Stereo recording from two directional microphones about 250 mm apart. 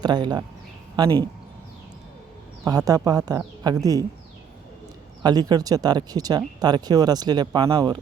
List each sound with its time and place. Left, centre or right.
0.0 s speech: centre
2.6 s speech: centre
5.2 s speech: centre